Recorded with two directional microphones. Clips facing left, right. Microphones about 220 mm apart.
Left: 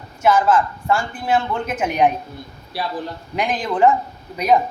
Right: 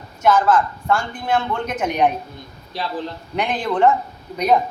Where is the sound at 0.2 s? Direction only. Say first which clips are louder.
Even; 10° left (ahead or behind).